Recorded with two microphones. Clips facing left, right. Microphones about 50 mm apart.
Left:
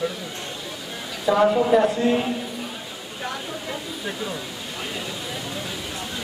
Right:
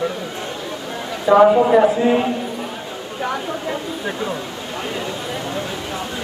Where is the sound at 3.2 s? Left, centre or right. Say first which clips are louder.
Right 7 dB; centre.